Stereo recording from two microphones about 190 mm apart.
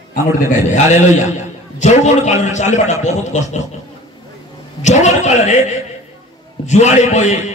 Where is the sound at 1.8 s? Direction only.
40° left (ahead or behind).